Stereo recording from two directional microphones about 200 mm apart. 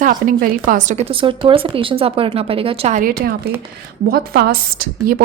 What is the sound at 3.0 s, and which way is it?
A woman's voice, 45° right (ahead or behind).